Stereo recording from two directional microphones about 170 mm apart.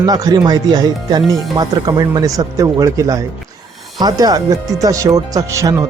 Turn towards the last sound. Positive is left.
turn(degrees=-15)  # may be behind; listen again after turning